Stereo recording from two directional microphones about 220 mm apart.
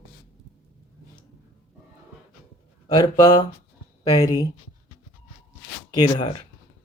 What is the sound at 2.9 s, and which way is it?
Speech, 20° left (ahead or behind).